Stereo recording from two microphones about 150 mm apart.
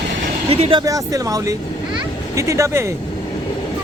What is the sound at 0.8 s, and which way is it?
Speech, 25° right (ahead or behind).